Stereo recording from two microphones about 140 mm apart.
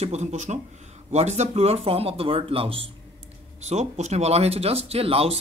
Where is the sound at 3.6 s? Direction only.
50° right (ahead or behind).